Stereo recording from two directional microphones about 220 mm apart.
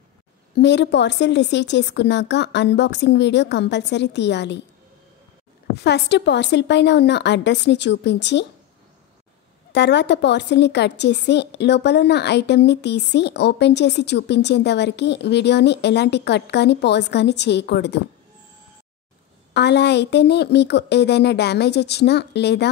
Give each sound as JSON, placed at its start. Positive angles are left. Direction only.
{"t": 0.6, "sound": "a woman's voice", "side_deg": 50}
{"t": 5.9, "sound": "a woman's voice", "side_deg": 50}
{"t": 9.7, "sound": "a woman's voice", "side_deg": 50}
{"t": 19.5, "sound": "a woman's voice", "side_deg": 50}